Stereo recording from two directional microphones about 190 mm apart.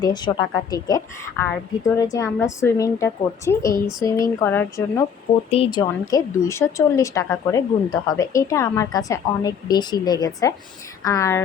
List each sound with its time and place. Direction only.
0.0 s a woman's voice: 20° left (ahead or behind)
5.5 s a woman's voice: 30° left (ahead or behind); by 11.4 s 15° left (ahead or behind)